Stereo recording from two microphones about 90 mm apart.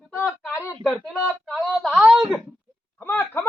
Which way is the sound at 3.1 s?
20° left (ahead or behind).